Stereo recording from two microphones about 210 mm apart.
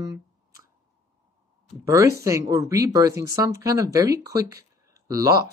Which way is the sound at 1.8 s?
15° right (ahead or behind).